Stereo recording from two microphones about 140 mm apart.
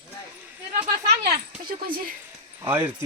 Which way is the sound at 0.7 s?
75° right (ahead or behind).